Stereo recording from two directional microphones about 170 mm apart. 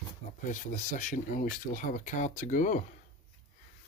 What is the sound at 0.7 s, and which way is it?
Speech, 50° left (ahead or behind).